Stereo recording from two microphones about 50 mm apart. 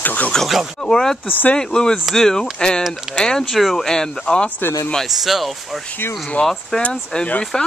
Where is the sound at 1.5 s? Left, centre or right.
Centre.